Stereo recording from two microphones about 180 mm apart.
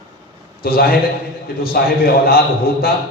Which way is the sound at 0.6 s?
55° left (ahead or behind).